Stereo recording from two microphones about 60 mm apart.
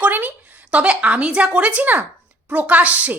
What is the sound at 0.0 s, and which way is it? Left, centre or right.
A woman's voice, right.